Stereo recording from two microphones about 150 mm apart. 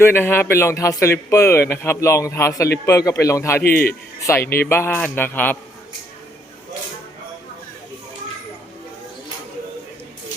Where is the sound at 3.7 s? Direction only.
85° left.